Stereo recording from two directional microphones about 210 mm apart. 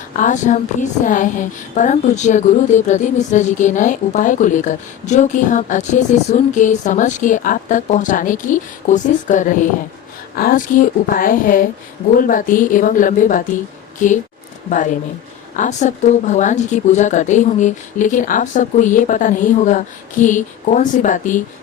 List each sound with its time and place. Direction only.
0.2 s a woman's voice: 35° left (ahead or behind)